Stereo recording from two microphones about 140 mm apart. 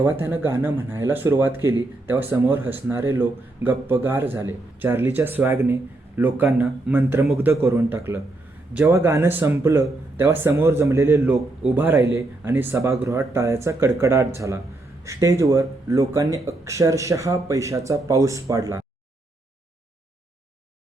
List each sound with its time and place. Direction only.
0.2 s speech: 15° right (ahead or behind)